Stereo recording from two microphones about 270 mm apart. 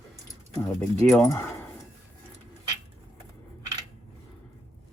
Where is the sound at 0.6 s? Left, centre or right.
Centre.